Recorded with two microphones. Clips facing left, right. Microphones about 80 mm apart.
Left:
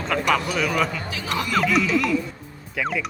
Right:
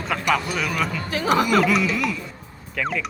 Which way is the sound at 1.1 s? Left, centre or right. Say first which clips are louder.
Right 7 dB; right.